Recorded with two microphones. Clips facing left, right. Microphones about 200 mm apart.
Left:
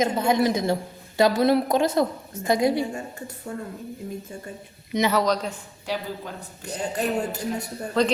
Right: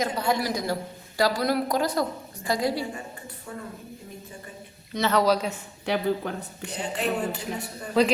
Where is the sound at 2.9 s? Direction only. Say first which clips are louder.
Left 5 dB; 45° left (ahead or behind).